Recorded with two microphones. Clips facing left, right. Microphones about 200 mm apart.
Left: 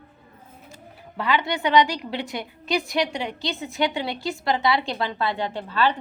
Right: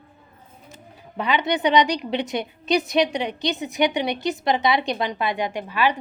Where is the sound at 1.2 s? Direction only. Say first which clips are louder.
Right 2 dB; 20° right (ahead or behind).